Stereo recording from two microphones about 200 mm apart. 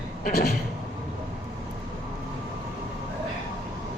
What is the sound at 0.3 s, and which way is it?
Speech, 50° left (ahead or behind).